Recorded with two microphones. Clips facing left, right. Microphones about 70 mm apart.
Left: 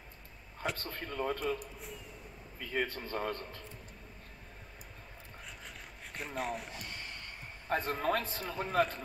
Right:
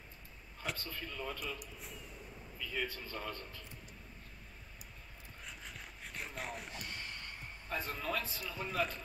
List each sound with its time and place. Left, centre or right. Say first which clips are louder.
0.7 s a man's voice: left 6 dB; left
5.4 s rub: even; centre
7.6 s a man's voice: left 8 dB; left